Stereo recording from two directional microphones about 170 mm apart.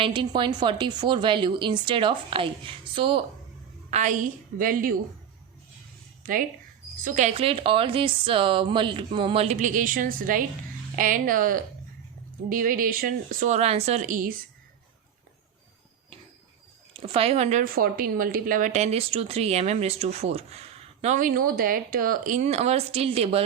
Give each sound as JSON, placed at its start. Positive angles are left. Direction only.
{"t": 0.0, "sound": "a woman's voice", "side_deg": -30}
{"t": 3.9, "sound": "a woman's voice", "side_deg": -50}
{"t": 6.2, "sound": "a woman's voice", "side_deg": -55}
{"t": 16.9, "sound": "speech", "side_deg": -30}
{"t": 17.6, "sound": "speech", "side_deg": -55}